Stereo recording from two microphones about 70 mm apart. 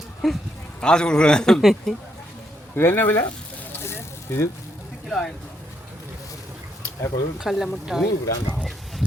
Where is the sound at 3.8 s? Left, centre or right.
Left.